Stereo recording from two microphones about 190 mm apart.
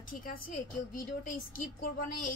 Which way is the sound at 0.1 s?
45° left (ahead or behind).